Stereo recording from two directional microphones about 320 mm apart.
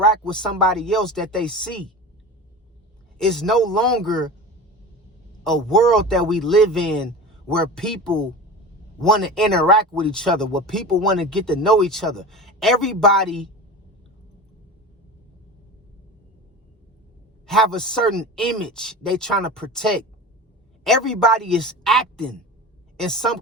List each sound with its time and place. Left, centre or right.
0.0 s speech: centre
3.2 s speech: centre
5.4 s speech: centre
17.4 s speech: centre